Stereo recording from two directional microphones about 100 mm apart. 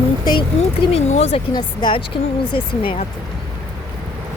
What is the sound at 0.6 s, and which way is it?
Speech, 90° left.